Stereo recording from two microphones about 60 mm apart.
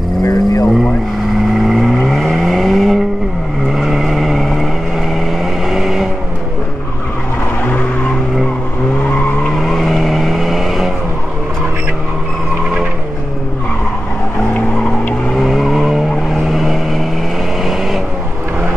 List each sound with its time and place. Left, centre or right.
0.2 s vehicle: left
1.6 s vehicle: centre
9.6 s vehicle: centre
15.3 s vehicle: centre